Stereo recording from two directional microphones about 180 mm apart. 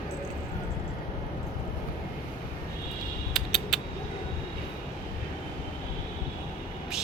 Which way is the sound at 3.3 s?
Centre (ahead or behind).